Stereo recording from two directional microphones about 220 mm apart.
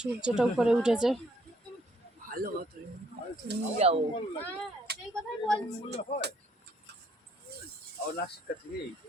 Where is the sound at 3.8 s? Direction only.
30° right (ahead or behind).